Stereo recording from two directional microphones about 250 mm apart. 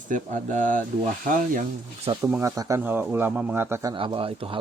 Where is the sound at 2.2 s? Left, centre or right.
Centre.